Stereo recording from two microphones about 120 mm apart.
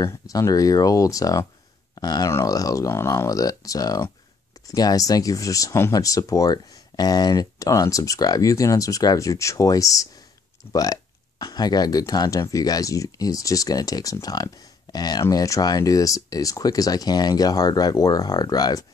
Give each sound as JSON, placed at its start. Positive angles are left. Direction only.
{"t": 0.0, "sound": "speech", "side_deg": 25}